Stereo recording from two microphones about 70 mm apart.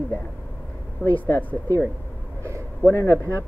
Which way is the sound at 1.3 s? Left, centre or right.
Left.